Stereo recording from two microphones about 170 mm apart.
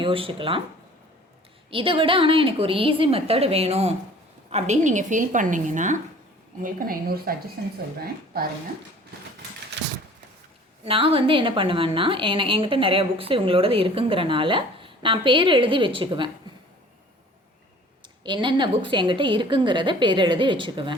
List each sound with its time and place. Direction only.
0.0 s a woman's voice: 30° right (ahead or behind)
1.7 s a woman's voice: 30° right (ahead or behind); by 7.7 s 65° right (ahead or behind)
10.8 s a woman's voice: 30° right (ahead or behind)
18.2 s a woman's voice: 25° right (ahead or behind)